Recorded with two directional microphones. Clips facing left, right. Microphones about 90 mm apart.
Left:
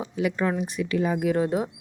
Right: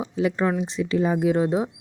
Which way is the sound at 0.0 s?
25° right (ahead or behind).